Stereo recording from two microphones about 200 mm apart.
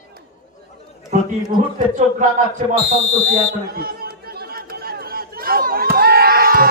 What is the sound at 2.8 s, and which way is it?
Speech, 30° left (ahead or behind).